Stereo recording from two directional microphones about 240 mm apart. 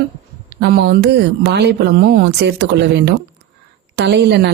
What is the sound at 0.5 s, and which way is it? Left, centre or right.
Speech, right.